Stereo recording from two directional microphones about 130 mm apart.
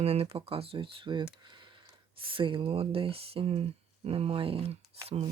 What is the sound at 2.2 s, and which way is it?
Speech, 40° right (ahead or behind).